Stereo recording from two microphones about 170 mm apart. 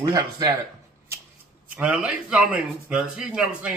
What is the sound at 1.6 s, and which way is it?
Speech, 10° right (ahead or behind).